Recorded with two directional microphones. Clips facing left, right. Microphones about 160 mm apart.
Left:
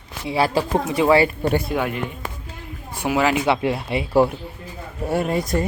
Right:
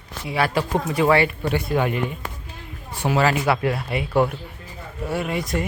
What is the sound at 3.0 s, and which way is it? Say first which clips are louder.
Speech: left 1 dB; 10° left (ahead or behind).